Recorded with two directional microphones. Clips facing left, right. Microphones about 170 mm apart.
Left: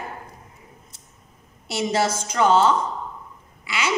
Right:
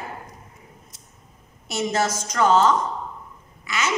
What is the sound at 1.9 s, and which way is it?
Speech, 30° left (ahead or behind).